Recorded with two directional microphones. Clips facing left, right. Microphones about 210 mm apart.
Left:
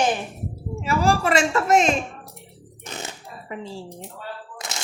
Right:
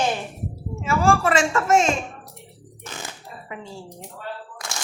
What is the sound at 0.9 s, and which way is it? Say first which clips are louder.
A woman's voice: right 1 dB; 40° left (ahead or behind).